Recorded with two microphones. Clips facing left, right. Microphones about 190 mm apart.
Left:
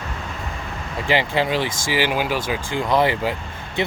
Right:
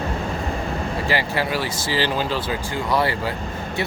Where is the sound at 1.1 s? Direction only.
20° left (ahead or behind).